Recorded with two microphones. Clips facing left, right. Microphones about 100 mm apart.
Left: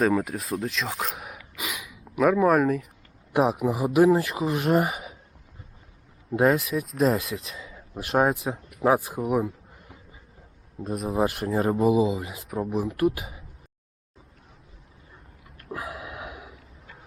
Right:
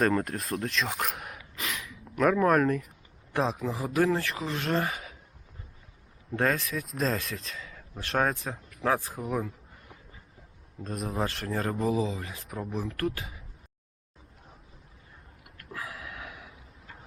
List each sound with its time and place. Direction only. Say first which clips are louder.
0.0 s a man's voice: left 3 dB; 5° left (ahead or behind)
1.1 s gasp: left 2 dB; 5° left (ahead or behind)
1.5 s a sound: left 1 dB; 10° left (ahead or behind)
3.3 s a man's voice: left 6 dB; 15° left (ahead or behind)
6.3 s a man's voice: left 6 dB; 15° left (ahead or behind)
7.6 s speech: left 5 dB; 15° left (ahead or behind)
11.1 s a man's voice: left 7 dB; 15° left (ahead or behind)
15.5 s a sound: left 5 dB; 25° left (ahead or behind)